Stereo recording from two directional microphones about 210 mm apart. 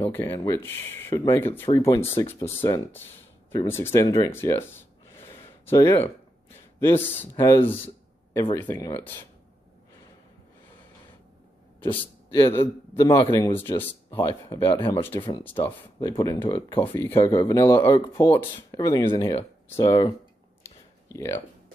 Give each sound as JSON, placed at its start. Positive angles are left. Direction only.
{"t": 0.0, "sound": "speech", "side_deg": 10}
{"t": 4.0, "sound": "a man's voice", "side_deg": 25}
{"t": 4.3, "sound": "speech", "side_deg": 10}
{"t": 5.3, "sound": "a sound", "side_deg": 15}
{"t": 6.8, "sound": "speech", "side_deg": 10}
{"t": 11.8, "sound": "a man's voice", "side_deg": 25}
{"t": 20.6, "sound": "a sound", "side_deg": 15}